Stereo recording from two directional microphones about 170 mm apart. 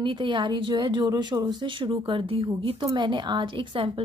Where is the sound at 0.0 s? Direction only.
30° right (ahead or behind).